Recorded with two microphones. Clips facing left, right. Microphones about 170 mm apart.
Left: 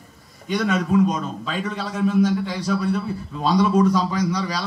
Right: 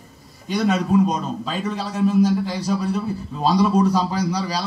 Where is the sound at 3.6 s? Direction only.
35° right (ahead or behind).